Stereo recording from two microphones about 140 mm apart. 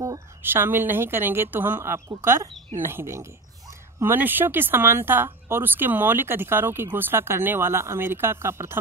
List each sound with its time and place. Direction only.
0.4 s speech: 15° right (ahead or behind)